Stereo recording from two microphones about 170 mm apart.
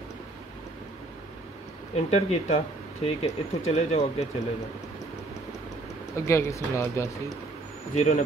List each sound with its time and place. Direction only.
2.0 s speech: 40° left (ahead or behind)
6.1 s speech: 15° left (ahead or behind)
7.9 s speech: 40° left (ahead or behind)